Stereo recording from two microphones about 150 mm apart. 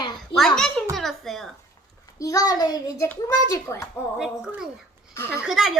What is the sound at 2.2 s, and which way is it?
Child singing, 25° left (ahead or behind).